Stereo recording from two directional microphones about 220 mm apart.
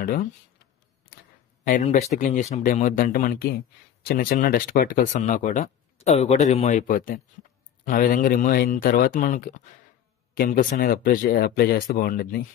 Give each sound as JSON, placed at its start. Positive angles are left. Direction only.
{"t": 0.0, "sound": "speech", "side_deg": 35}
{"t": 1.6, "sound": "speech", "side_deg": 35}